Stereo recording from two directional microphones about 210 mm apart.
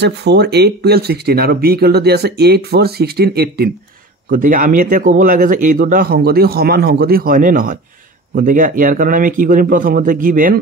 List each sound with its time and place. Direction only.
0.0 s speech: 55° right (ahead or behind)